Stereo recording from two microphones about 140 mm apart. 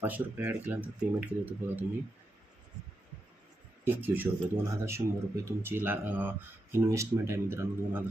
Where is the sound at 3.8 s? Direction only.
15° right (ahead or behind).